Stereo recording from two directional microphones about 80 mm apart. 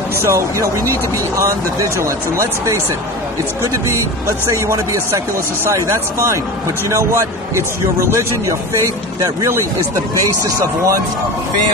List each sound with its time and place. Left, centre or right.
0.2 s speech: right
4.3 s speech: right